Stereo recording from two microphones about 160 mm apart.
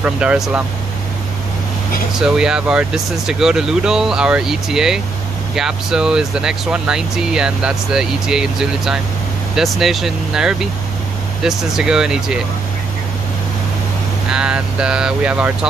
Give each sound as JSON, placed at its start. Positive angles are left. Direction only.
{"t": 0.0, "sound": "speech", "side_deg": -10}
{"t": 2.1, "sound": "speech", "side_deg": -5}
{"t": 14.3, "sound": "speech", "side_deg": -5}